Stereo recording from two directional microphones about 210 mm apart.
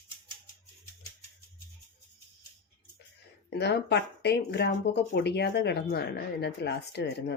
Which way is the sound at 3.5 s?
55° left (ahead or behind).